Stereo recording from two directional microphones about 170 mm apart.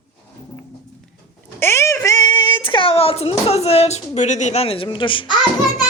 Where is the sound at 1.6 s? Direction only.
15° left (ahead or behind).